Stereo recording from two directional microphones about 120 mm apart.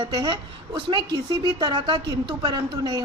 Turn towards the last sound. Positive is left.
turn(degrees=-35)  # may be behind; listen again after turning